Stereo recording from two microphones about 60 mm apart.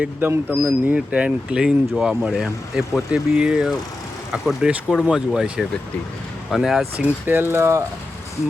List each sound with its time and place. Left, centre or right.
0.2 s speech: right
0.5 s speech: right; by 6.8 s centre
7.3 s speech: right